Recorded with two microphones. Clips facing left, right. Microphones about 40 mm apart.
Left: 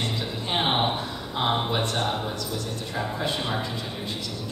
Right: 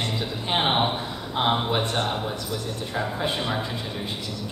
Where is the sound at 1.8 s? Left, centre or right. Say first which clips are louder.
Right 1 dB; right.